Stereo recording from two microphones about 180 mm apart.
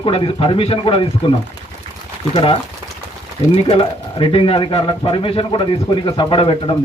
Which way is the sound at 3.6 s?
30° left (ahead or behind).